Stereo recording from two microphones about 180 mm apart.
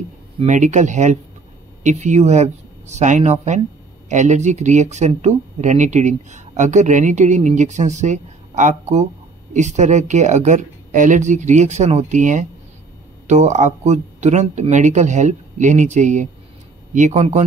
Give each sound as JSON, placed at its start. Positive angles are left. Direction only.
{"t": 0.4, "sound": "speech", "side_deg": -40}